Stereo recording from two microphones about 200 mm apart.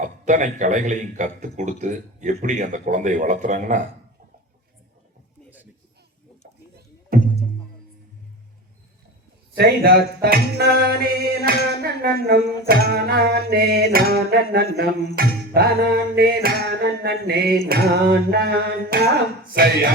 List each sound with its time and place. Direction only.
0.0 s a man's voice: 40° right (ahead or behind)
7.1 s music: 45° right (ahead or behind)
9.6 s a sound: 50° right (ahead or behind)